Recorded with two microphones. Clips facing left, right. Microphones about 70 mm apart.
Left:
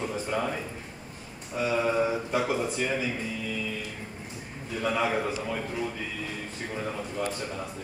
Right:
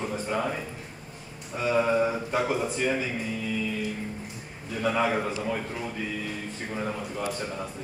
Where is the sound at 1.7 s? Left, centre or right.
Centre.